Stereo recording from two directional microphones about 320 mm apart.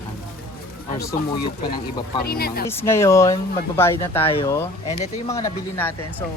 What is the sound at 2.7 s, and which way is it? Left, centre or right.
Speech, centre.